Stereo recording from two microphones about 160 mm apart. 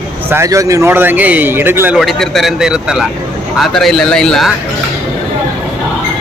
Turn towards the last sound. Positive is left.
turn(degrees=0)  # may be behind; listen again after turning